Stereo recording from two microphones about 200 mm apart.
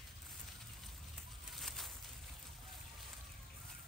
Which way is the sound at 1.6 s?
Centre (ahead or behind).